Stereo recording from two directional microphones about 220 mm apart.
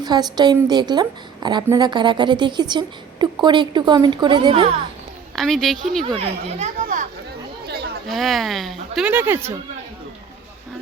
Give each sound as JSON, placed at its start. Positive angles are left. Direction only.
{"t": 0.0, "sound": "a woman's voice", "side_deg": -20}
{"t": 5.4, "sound": "speech", "side_deg": 0}
{"t": 6.1, "sound": "speech", "side_deg": -25}
{"t": 8.0, "sound": "speech", "side_deg": 0}